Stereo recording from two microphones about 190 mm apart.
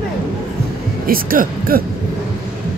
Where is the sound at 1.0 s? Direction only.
50° right (ahead or behind).